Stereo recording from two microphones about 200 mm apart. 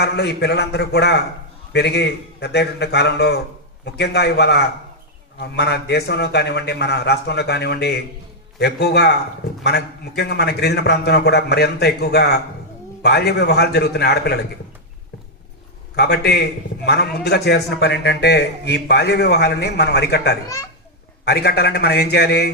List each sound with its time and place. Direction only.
0.0 s a man's voice: 55° left (ahead or behind)
16.0 s a man's voice: 55° left (ahead or behind)